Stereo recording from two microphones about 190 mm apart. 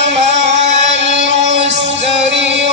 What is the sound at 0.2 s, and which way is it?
Music, 35° right (ahead or behind).